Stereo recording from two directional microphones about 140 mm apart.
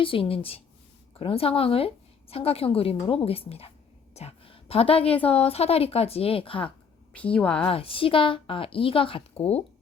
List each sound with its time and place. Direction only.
0.0 s a woman's voice: 40° left (ahead or behind)
6.7 s a woman's voice: 10° left (ahead or behind)
7.7 s a woman's voice: 40° left (ahead or behind)